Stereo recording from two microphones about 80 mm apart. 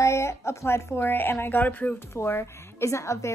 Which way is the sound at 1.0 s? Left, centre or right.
Left.